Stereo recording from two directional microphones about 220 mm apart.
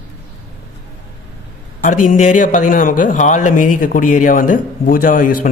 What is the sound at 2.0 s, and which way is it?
Speech, 35° left (ahead or behind).